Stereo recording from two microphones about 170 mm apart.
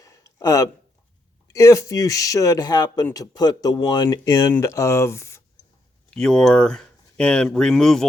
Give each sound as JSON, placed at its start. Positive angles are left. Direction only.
{"t": 0.0, "sound": "a sound", "side_deg": 20}
{"t": 1.5, "sound": "speech", "side_deg": 20}
{"t": 6.1, "sound": "speech", "side_deg": 5}